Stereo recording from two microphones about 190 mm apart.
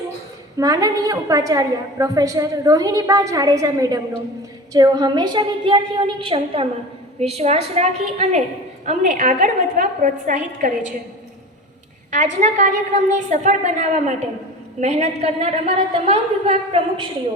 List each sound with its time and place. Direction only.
0.6 s a woman's voice: 20° right (ahead or behind); by 10.7 s 45° right (ahead or behind)
12.1 s a woman's voice: 40° right (ahead or behind)